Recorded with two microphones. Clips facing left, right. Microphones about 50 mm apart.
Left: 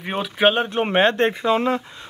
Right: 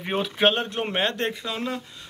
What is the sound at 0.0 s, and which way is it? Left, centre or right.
Speech, centre.